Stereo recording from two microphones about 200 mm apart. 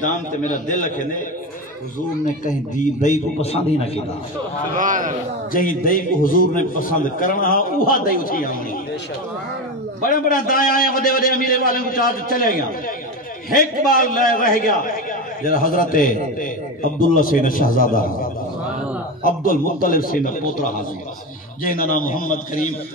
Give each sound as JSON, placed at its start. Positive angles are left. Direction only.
{"t": 0.0, "sound": "a man's voice", "side_deg": 40}
{"t": 2.4, "sound": "a man's voice", "side_deg": 40}
{"t": 4.7, "sound": "a man's voice", "side_deg": -40}
{"t": 5.5, "sound": "a man's voice", "side_deg": 45}
{"t": 10.0, "sound": "a man's voice", "side_deg": 45}